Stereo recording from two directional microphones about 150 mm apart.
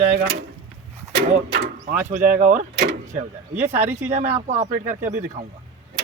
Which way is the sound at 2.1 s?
65° right (ahead or behind).